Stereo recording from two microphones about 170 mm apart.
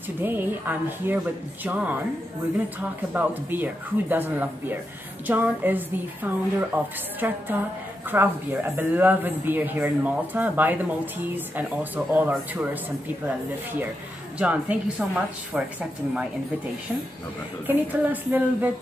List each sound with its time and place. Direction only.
0.2 s speech: 10° right (ahead or behind)
14.4 s speech: 10° right (ahead or behind)
17.6 s speech: 10° right (ahead or behind)